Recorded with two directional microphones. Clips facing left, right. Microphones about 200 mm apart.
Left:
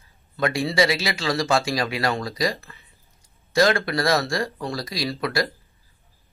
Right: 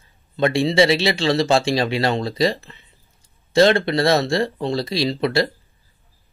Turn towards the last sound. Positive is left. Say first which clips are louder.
# right 5 dB
turn(degrees=-25)  # may be behind; listen again after turning